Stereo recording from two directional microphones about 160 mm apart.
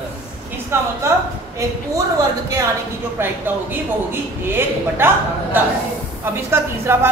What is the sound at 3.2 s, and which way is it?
A man's voice, 15° right (ahead or behind).